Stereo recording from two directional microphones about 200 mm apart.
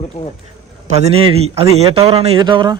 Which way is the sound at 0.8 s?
30° right (ahead or behind).